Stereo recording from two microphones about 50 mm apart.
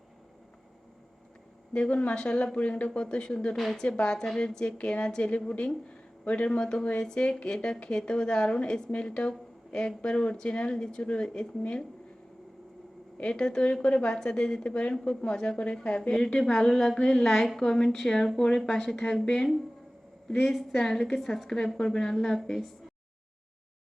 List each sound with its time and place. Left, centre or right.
1.7 s a woman's voice: left
3.5 s a woman's voice: centre
4.0 s a woman's voice: centre
13.1 s a woman's voice: centre
14.9 s a woman's voice: centre
20.4 s a woman's voice: centre